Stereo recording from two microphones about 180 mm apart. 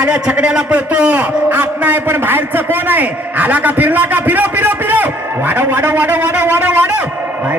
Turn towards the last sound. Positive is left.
turn(degrees=-10)  # may be behind; listen again after turning